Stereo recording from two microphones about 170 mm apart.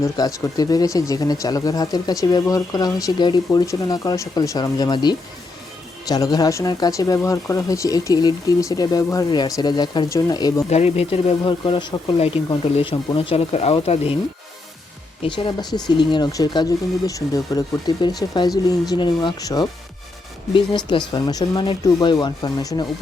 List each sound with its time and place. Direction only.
0.0 s speech: 20° left (ahead or behind)
10.7 s speech: 40° left (ahead or behind)
15.2 s speech: 30° left (ahead or behind)